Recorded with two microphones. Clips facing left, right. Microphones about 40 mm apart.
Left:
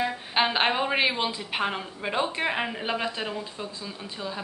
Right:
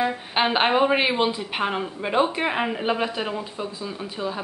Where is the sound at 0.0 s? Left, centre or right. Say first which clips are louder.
Right 3 dB; centre.